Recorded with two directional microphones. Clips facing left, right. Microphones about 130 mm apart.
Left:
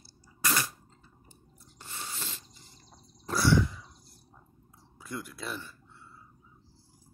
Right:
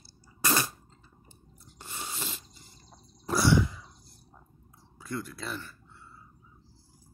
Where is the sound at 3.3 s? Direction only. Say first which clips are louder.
Right 1 dB; 15° right (ahead or behind).